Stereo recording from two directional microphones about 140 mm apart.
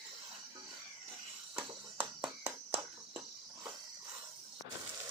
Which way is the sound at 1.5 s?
10° right (ahead or behind).